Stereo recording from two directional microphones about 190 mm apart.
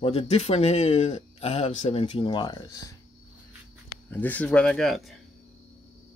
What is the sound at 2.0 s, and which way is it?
Speech, 25° left (ahead or behind).